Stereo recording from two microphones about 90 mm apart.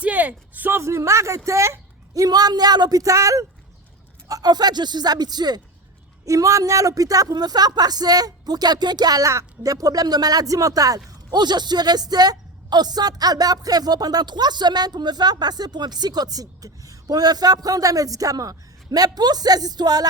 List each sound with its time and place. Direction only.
0.0 s a woman's voice: 15° right (ahead or behind); by 5.6 s 50° right (ahead or behind)
6.2 s speech: 35° right (ahead or behind)